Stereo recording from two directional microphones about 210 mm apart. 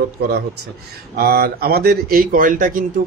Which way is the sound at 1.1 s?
45° right (ahead or behind).